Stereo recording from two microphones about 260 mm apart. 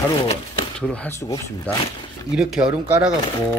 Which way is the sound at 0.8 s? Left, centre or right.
Centre.